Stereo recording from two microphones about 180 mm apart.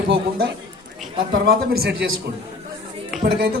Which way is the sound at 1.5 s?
60° right (ahead or behind).